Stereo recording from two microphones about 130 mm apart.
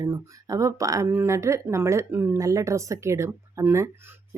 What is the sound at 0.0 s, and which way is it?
Speech, 25° right (ahead or behind).